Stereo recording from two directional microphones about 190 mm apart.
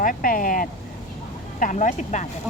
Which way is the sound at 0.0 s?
45° left (ahead or behind).